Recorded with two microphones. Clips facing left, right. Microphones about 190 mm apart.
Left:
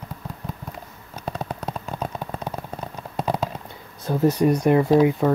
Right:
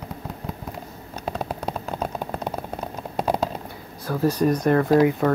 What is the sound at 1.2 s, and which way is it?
Vehicle, centre (ahead or behind).